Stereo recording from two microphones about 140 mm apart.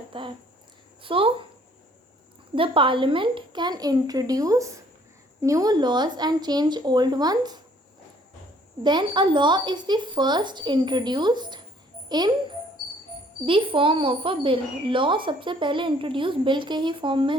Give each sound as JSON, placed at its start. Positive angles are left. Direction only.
{"t": 0.1, "sound": "a woman's voice", "side_deg": -35}
{"t": 2.6, "sound": "speech", "side_deg": -40}
{"t": 8.8, "sound": "a woman's voice", "side_deg": -30}
{"t": 13.4, "sound": "a woman's voice", "side_deg": -40}